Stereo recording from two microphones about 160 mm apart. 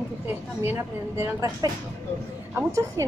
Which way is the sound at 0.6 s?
15° right (ahead or behind).